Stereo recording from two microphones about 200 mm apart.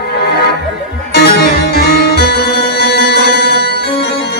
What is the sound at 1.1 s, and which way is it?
Music, 55° left (ahead or behind).